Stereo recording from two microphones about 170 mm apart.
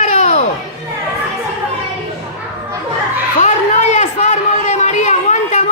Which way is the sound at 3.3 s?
40° left (ahead or behind).